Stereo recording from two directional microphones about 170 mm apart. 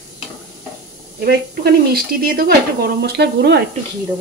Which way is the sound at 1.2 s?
65° right (ahead or behind).